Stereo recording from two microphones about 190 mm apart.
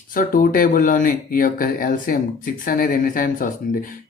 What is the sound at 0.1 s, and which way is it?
Speech, 45° left (ahead or behind).